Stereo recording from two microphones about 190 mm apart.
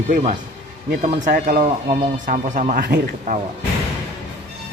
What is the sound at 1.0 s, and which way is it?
Speech, 45° right (ahead or behind).